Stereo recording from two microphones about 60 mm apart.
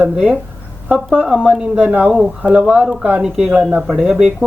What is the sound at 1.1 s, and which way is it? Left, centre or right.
Speech, centre.